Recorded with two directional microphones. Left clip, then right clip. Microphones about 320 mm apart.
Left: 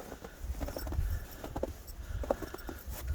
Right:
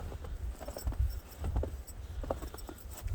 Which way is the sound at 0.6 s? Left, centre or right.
Left.